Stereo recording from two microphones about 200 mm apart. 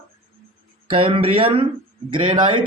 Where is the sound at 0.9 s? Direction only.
25° right (ahead or behind).